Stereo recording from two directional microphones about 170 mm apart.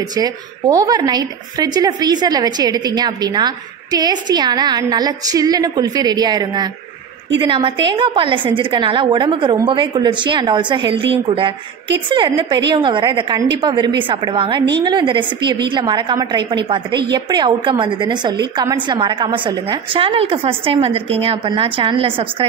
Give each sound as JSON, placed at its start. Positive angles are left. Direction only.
{"t": 0.1, "sound": "a woman's voice", "side_deg": -25}